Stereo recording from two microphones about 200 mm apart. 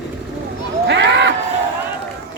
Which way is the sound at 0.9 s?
65° right (ahead or behind).